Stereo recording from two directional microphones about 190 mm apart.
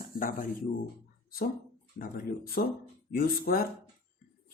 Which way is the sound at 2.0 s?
50° left (ahead or behind).